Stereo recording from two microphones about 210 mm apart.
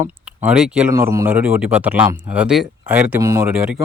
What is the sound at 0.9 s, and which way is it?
A man's voice, 15° right (ahead or behind).